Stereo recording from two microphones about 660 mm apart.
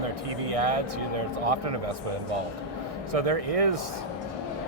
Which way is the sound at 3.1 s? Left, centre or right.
Right.